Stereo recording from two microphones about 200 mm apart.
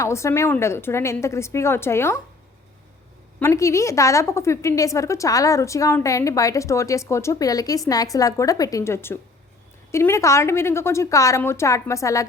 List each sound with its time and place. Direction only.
0.0 s a woman's voice: 15° left (ahead or behind)
3.4 s a woman's voice: 15° left (ahead or behind)